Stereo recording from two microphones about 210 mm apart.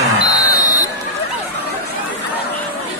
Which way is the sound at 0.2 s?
20° left (ahead or behind).